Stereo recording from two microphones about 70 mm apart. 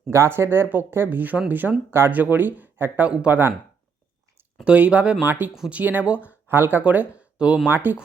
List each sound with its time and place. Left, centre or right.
0.1 s speech: right
4.6 s speech: centre
7.7 s speech: right